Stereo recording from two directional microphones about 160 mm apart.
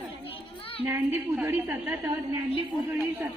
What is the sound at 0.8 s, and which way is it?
A woman's voice, 15° right (ahead or behind).